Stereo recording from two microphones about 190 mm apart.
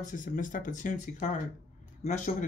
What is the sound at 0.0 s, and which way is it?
Speech, 45° left (ahead or behind).